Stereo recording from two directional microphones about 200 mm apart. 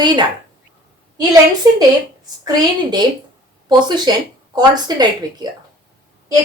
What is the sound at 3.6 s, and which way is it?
Speech, 20° right (ahead or behind).